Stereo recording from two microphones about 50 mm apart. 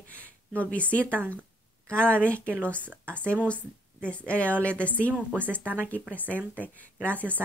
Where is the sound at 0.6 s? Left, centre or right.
Left.